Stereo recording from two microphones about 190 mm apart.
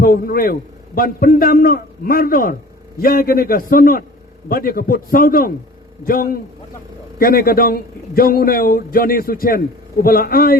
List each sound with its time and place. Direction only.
0.0 s a man's voice: 50° left (ahead or behind)
7.2 s a man's voice: 50° left (ahead or behind)